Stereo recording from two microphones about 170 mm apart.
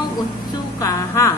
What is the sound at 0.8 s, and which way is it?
Music, 20° left (ahead or behind).